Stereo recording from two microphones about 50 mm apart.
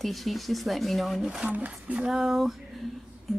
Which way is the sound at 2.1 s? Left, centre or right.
Centre.